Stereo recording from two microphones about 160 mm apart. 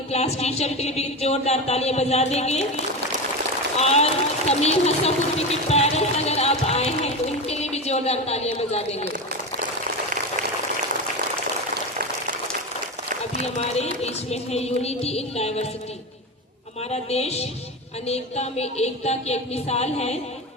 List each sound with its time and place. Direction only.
0.1 s speech: 40° left (ahead or behind)
13.4 s speech: 40° left (ahead or behind)
16.9 s speech: 40° left (ahead or behind)